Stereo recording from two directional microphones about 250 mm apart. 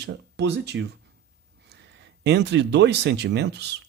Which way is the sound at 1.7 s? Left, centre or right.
Right.